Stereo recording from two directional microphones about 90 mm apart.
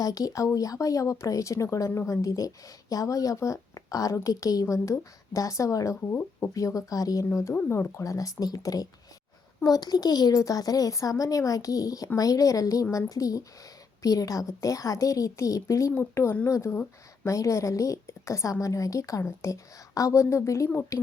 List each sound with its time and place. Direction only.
0.0 s speech: 45° left (ahead or behind)